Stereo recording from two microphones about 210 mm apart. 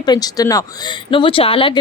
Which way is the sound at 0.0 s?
20° left (ahead or behind).